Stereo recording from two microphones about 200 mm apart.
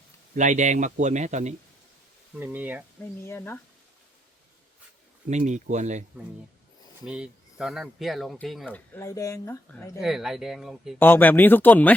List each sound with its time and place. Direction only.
0.3 s speech: 35° right (ahead or behind)
2.4 s speech: 10° right (ahead or behind)
3.0 s speech: 10° left (ahead or behind)
5.3 s speech: 35° right (ahead or behind)
7.0 s speech: centre (ahead or behind); by 9.6 s 15° left (ahead or behind)
10.0 s speech: centre (ahead or behind)
11.0 s speech: 10° left (ahead or behind)